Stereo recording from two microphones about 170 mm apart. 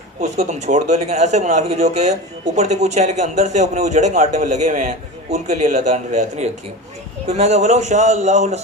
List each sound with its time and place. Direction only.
0.2 s a man's voice: 40° right (ahead or behind)